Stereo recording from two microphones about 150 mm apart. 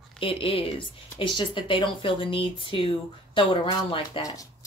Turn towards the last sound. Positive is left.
turn(degrees=25)  # may be behind; listen again after turning